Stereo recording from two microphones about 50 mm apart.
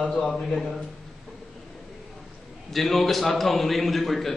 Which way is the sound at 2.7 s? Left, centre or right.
Centre.